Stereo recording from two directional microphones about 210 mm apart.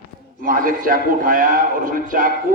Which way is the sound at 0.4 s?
40° right (ahead or behind).